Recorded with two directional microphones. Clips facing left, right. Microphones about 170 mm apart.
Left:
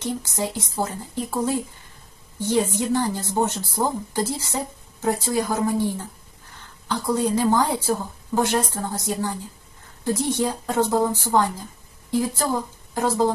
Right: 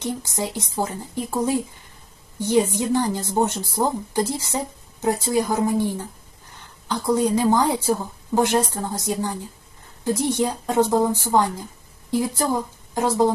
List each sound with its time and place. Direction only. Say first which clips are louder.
0.0 s a woman's voice: even; 15° right (ahead or behind)